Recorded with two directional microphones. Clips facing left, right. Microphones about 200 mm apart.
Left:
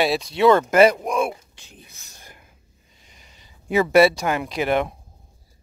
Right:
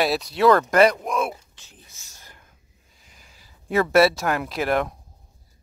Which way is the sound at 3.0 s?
Centre (ahead or behind).